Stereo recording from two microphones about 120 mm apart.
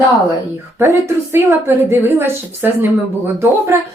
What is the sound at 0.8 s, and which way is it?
A woman's voice, 25° right (ahead or behind).